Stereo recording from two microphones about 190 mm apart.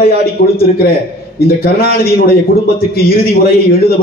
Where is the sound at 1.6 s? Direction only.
55° left (ahead or behind).